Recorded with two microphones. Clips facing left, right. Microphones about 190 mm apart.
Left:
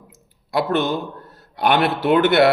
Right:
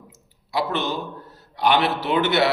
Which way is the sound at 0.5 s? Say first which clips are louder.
Left 5 dB; 50° left (ahead or behind).